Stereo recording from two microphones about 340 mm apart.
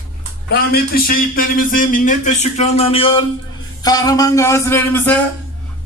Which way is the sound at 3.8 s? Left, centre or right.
Centre.